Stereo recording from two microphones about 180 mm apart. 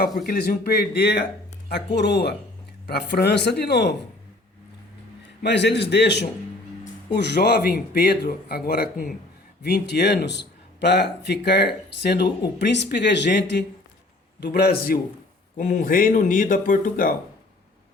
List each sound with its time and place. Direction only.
0.3 s a man's voice: 60° left (ahead or behind)
5.4 s a man's voice: 70° left (ahead or behind)
15.5 s speech: 45° left (ahead or behind)